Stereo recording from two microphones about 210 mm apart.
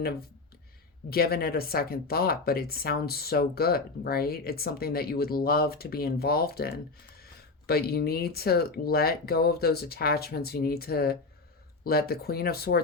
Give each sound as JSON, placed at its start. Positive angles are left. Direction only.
{"t": 1.1, "sound": "speech", "side_deg": 45}